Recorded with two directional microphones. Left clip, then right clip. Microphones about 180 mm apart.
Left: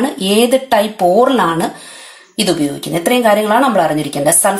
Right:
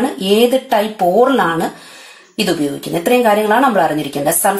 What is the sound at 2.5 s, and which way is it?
A woman's voice, 25° left (ahead or behind).